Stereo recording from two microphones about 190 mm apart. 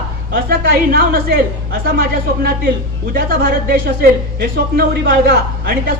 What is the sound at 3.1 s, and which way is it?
Speech, 50° right (ahead or behind).